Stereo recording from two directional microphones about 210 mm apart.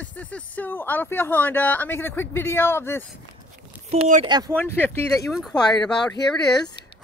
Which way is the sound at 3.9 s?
30° right (ahead or behind).